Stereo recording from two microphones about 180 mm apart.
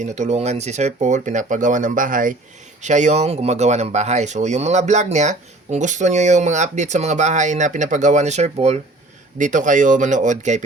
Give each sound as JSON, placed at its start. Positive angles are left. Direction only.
{"t": 0.0, "sound": "speech", "side_deg": -40}